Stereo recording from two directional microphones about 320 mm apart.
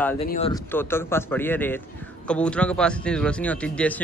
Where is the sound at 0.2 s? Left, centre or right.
Centre.